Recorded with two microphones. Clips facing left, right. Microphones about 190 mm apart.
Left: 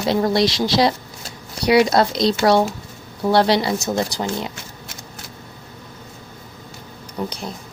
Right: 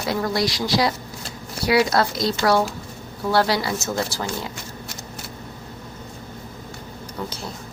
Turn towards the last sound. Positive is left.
turn(degrees=15)  # may be behind; listen again after turning